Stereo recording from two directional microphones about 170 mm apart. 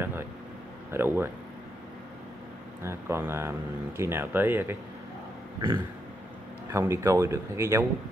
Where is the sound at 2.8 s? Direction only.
15° right (ahead or behind).